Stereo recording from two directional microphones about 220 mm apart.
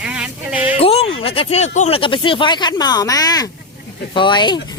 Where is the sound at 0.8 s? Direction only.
25° left (ahead or behind).